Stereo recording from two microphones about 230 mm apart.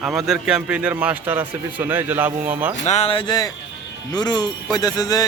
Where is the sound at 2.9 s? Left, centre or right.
Left.